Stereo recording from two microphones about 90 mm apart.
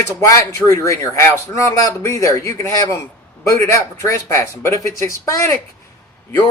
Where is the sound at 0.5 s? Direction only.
35° left (ahead or behind).